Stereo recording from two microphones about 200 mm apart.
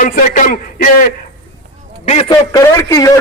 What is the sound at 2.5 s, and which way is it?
Speech, 15° left (ahead or behind).